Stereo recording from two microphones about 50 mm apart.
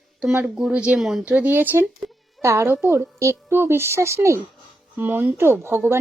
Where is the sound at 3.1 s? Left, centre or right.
Right.